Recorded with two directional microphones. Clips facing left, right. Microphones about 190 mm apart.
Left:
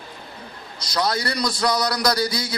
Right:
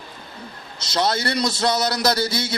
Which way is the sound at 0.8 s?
25° right (ahead or behind).